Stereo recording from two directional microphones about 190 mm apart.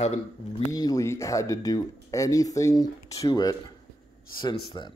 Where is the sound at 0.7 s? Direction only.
20° left (ahead or behind).